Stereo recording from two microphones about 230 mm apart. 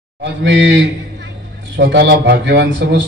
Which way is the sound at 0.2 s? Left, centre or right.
Right.